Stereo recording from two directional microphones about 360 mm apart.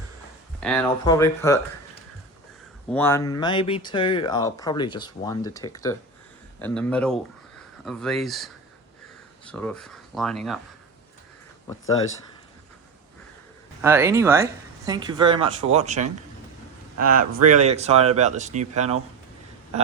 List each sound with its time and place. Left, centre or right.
0.6 s speech: centre
2.9 s speech: centre
13.8 s speech: centre